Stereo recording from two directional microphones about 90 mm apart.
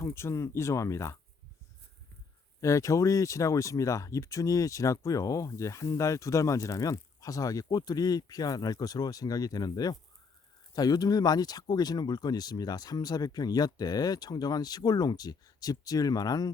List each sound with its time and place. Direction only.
0.0 s speech: 30° left (ahead or behind)
2.6 s speech: 35° left (ahead or behind)